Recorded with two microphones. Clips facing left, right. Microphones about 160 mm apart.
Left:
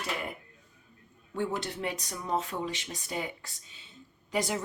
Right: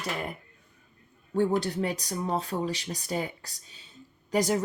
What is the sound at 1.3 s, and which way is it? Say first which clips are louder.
Speech: right 7 dB; 35° right (ahead or behind).